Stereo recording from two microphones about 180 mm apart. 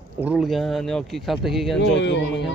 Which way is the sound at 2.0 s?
80° left.